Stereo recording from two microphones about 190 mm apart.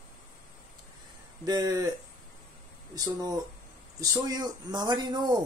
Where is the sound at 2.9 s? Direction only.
20° right (ahead or behind).